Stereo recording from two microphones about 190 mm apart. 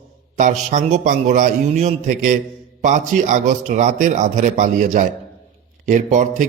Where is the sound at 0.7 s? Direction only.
40° right (ahead or behind).